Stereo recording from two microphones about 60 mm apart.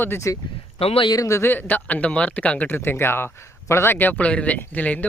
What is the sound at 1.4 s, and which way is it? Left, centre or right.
Speech, left.